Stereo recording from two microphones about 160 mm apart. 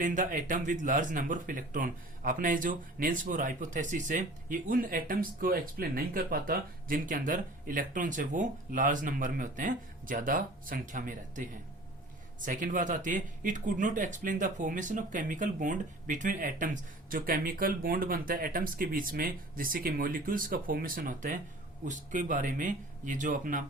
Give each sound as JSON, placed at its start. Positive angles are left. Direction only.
{"t": 0.0, "sound": "speech", "side_deg": -55}
{"t": 12.5, "sound": "speech", "side_deg": -55}